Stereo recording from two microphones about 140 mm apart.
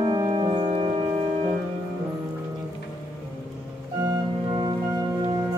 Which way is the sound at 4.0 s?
30° right (ahead or behind).